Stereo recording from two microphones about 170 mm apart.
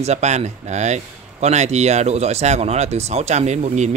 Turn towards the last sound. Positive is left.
turn(degrees=-45)  # may be behind; listen again after turning